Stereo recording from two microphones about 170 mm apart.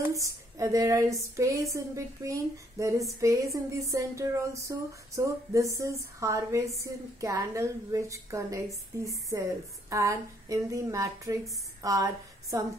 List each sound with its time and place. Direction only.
0.6 s a woman's voice: 20° right (ahead or behind)
3.9 s a sound: 20° right (ahead or behind)
9.0 s a woman's voice: 20° right (ahead or behind)